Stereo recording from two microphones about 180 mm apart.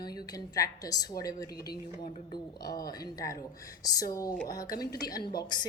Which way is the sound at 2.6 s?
20° left (ahead or behind).